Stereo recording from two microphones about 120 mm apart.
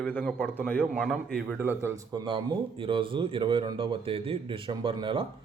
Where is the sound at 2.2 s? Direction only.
45° right (ahead or behind).